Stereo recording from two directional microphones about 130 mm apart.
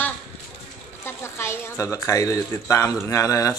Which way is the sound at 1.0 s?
20° left (ahead or behind).